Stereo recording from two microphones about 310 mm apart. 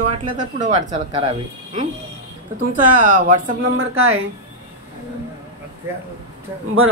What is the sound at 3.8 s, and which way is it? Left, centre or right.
Speech, right.